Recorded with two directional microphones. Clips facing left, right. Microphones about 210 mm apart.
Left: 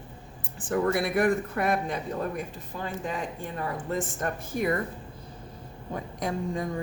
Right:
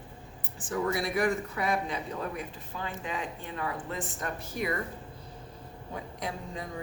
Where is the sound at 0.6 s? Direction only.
60° left (ahead or behind).